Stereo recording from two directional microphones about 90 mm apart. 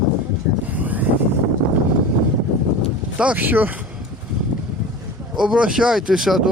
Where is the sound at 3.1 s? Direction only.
15° right (ahead or behind).